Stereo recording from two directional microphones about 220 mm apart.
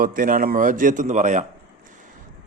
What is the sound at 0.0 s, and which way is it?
A man's voice, 40° right (ahead or behind).